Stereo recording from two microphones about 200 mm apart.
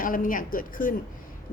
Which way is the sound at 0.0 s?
45° left (ahead or behind).